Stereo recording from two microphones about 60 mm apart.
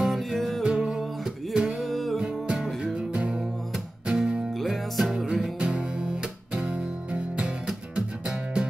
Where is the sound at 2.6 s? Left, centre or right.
Centre.